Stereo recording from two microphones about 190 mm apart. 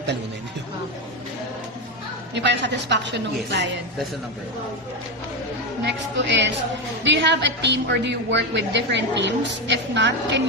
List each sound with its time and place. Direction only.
2.3 s a woman's voice: 65° right (ahead or behind)
5.8 s a woman's voice: 70° right (ahead or behind)